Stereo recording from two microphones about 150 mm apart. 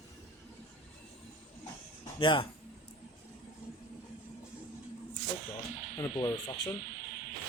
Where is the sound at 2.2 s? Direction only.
35° left (ahead or behind).